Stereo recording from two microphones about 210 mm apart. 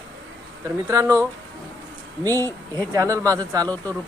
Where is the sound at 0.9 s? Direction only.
15° right (ahead or behind).